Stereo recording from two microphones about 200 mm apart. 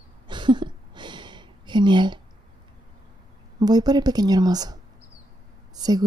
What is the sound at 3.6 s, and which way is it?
A woman's voice, 20° right (ahead or behind).